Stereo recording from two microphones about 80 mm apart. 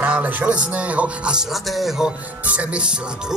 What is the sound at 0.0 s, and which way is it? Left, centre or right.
Speech, right.